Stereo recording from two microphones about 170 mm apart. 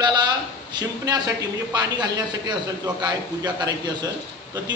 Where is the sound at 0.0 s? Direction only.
25° right (ahead or behind).